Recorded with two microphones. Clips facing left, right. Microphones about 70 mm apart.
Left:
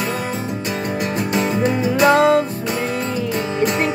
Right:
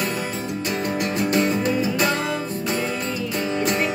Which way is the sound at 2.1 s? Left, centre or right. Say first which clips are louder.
Left 11 dB; left.